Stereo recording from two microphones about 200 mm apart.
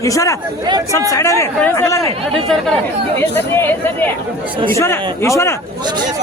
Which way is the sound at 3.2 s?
10° left (ahead or behind).